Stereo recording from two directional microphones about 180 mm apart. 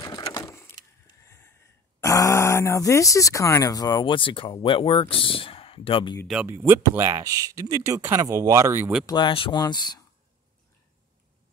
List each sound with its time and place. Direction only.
0.0 s vehicle: 20° left (ahead or behind)
2.0 s speech: 15° left (ahead or behind)
6.2 s speech: 10° right (ahead or behind)
9.0 s speech: 25° left (ahead or behind)